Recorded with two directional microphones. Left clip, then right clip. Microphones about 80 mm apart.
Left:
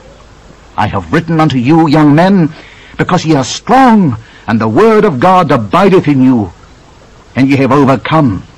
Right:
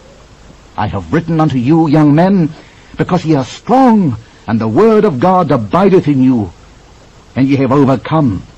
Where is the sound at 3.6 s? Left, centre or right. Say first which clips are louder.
Left 3 dB; left.